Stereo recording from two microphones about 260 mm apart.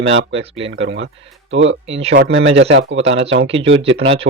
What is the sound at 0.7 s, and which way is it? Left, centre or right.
Speech, right.